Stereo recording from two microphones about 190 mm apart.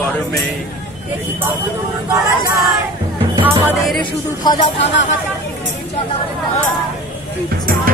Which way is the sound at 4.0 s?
25° left (ahead or behind).